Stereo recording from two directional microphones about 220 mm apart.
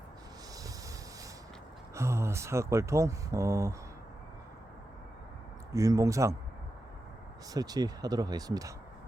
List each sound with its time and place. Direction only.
2.0 s speech: 10° right (ahead or behind)
5.7 s speech: 15° right (ahead or behind)
7.5 s speech: 15° right (ahead or behind)